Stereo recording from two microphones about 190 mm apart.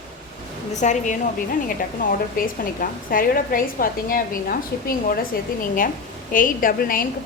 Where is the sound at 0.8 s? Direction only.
40° left (ahead or behind).